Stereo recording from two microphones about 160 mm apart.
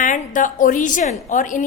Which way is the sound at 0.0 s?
55° left (ahead or behind).